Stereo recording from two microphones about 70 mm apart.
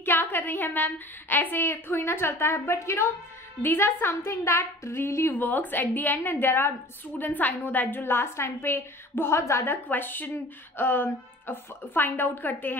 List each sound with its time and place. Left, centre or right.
0.0 s a woman's voice: left
9.8 s a woman's voice: left